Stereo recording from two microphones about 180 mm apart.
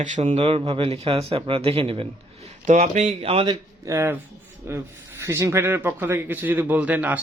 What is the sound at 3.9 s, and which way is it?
Speech, 15° right (ahead or behind).